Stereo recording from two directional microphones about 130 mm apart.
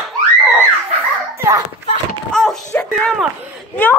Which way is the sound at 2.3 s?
5° left (ahead or behind).